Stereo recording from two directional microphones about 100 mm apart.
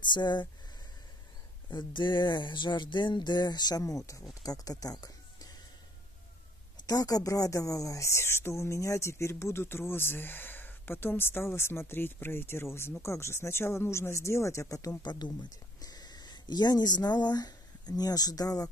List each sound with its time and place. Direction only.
0.0 s speech: 50° left (ahead or behind)
1.7 s speech: 50° left (ahead or behind)
6.9 s speech: 40° left (ahead or behind)